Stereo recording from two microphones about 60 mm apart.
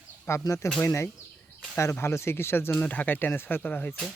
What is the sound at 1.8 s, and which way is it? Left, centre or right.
Speech, left.